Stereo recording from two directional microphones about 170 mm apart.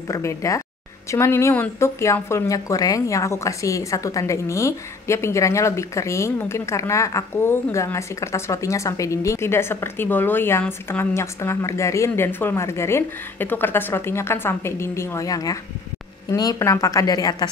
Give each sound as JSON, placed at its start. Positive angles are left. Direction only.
{"t": 0.1, "sound": "a woman's voice", "side_deg": 15}